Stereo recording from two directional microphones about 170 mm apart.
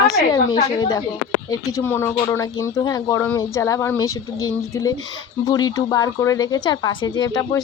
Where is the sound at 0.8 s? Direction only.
20° left (ahead or behind).